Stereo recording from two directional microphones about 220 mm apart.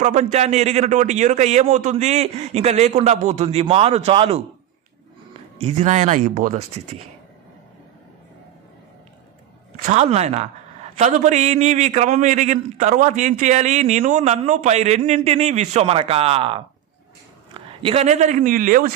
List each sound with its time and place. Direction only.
0.0 s a man's voice: 30° right (ahead or behind)
5.5 s a man's voice: 30° right (ahead or behind)
9.8 s a man's voice: 30° right (ahead or behind)